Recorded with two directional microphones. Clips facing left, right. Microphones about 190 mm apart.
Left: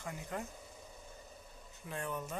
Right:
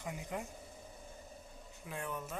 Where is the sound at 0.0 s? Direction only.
15° right (ahead or behind).